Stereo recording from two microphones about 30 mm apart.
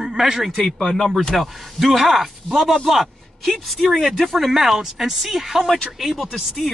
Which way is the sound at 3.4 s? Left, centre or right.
Centre.